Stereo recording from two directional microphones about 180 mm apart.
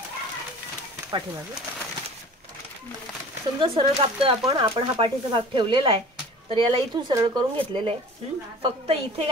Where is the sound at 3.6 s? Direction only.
30° right (ahead or behind).